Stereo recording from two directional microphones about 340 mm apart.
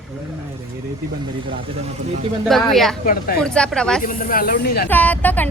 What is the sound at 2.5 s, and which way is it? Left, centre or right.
Speech, centre.